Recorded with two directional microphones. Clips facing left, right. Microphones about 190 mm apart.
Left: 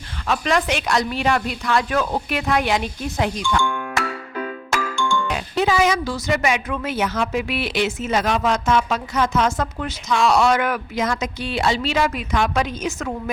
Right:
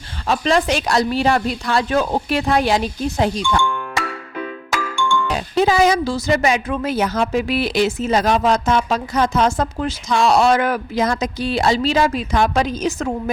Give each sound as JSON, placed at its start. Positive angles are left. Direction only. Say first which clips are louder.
{"t": 0.3, "sound": "speech", "louder": "right 3 dB", "side_deg": -30}
{"t": 5.3, "sound": "speech", "louder": "right 5 dB", "side_deg": -35}